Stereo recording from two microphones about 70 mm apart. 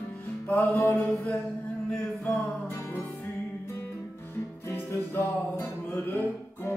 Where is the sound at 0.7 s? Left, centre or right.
Left.